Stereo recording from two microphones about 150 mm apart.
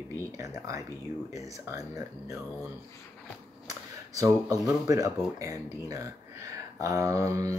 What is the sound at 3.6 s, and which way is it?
Speech, 20° right (ahead or behind).